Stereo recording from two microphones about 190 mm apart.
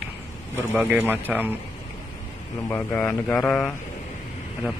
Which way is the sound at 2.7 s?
10° left (ahead or behind).